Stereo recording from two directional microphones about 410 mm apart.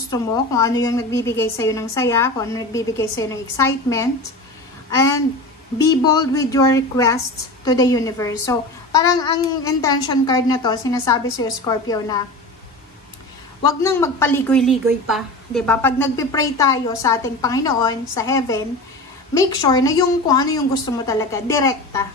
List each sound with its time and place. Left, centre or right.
0.1 s a woman's voice: centre
5.8 s speech: left
6.3 s a woman's voice: centre
13.7 s a woman's voice: centre